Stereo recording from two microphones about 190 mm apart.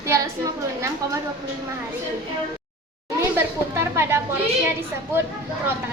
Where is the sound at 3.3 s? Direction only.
15° right (ahead or behind).